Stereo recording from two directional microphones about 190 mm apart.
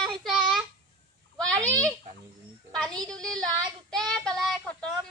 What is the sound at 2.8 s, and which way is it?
A child's voice, 5° left (ahead or behind).